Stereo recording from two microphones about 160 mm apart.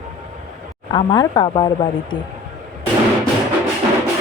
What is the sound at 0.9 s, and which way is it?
Speech, 30° left (ahead or behind).